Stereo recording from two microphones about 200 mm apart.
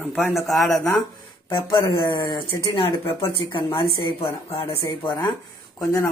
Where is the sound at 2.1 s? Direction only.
25° left (ahead or behind).